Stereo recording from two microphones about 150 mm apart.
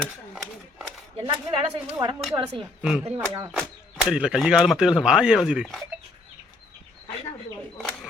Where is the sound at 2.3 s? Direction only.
20° right (ahead or behind).